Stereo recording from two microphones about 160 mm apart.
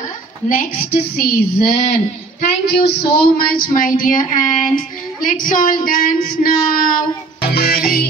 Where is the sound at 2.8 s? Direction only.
70° left (ahead or behind).